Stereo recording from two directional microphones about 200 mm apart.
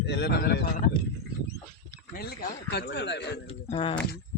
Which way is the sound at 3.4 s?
25° left (ahead or behind).